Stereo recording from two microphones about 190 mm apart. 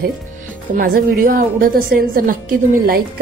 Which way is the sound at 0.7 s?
50° right (ahead or behind).